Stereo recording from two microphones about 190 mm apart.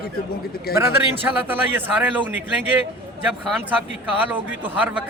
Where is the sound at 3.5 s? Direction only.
10° right (ahead or behind).